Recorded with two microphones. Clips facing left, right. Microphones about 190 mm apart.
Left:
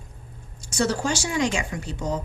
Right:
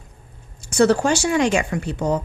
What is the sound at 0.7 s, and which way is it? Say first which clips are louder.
Speech: right 8 dB; 60° right (ahead or behind).